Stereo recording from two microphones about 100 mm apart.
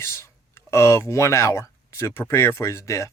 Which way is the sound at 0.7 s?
25° left (ahead or behind).